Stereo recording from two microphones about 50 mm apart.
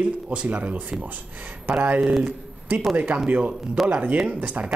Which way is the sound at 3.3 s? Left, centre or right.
Right.